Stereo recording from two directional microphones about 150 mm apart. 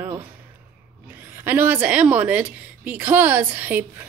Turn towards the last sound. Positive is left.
turn(degrees=-10)  # may be behind; listen again after turning